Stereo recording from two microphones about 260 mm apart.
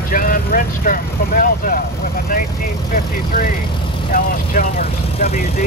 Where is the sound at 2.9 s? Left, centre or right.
Left.